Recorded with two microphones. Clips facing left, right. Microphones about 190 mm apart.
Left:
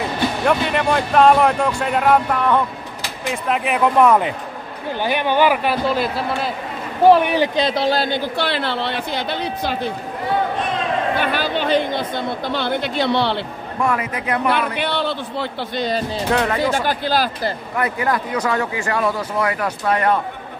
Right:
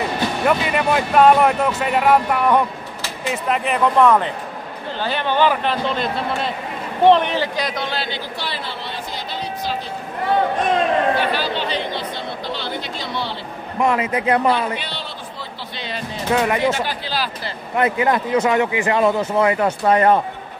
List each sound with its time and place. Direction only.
0.5 s speech: 5° right (ahead or behind)
3.4 s a man's voice: centre (ahead or behind); by 8.2 s 40° left (ahead or behind)
8.4 s speech: 65° left (ahead or behind)
11.1 s speech: 50° left (ahead or behind); by 13.4 s 65° left (ahead or behind)
13.7 s speech: 20° right (ahead or behind)
14.5 s speech: 60° left (ahead or behind)
16.3 s speech: 10° right (ahead or behind)
16.7 s speech: 50° left (ahead or behind)
17.7 s speech: 20° right (ahead or behind)